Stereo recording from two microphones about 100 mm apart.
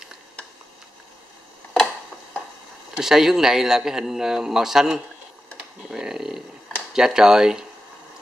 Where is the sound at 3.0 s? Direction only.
5° right (ahead or behind).